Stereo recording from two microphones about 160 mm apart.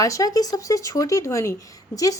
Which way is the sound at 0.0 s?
20° left (ahead or behind).